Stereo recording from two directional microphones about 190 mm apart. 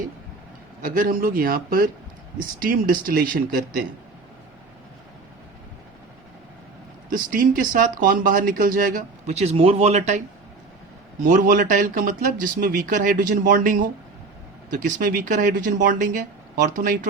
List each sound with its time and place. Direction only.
0.9 s speech: 45° right (ahead or behind)
7.1 s speech: 45° right (ahead or behind)
11.3 s speech: 40° right (ahead or behind)